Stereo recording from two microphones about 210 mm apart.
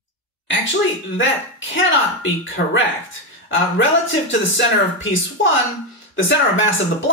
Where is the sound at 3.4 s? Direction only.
65° left (ahead or behind).